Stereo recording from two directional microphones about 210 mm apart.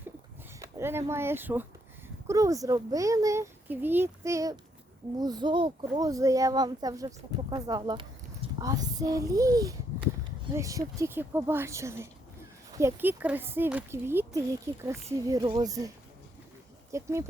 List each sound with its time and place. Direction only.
0.6 s a child's voice: 10° right (ahead or behind)
16.9 s a child's voice: 15° right (ahead or behind)